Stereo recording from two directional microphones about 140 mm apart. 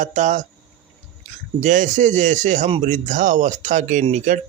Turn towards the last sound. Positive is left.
turn(degrees=-60)  # may be behind; listen again after turning